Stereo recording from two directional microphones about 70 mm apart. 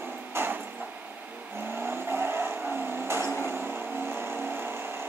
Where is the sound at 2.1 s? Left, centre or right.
Right.